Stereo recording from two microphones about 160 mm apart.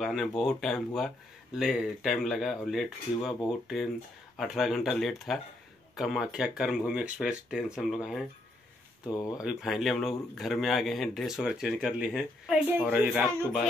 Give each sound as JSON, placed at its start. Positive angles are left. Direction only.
{"t": 0.0, "sound": "speech", "side_deg": -5}
{"t": 4.4, "sound": "speech", "side_deg": 0}
{"t": 9.1, "sound": "speech", "side_deg": 20}
{"t": 9.4, "sound": "speech", "side_deg": -5}